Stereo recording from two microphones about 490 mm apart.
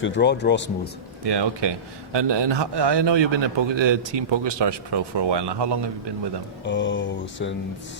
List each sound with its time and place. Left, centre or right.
0.0 s speech: left
1.2 s a man's voice: right
6.7 s speech: left